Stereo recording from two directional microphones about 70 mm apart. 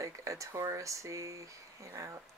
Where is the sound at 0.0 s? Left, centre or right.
Right.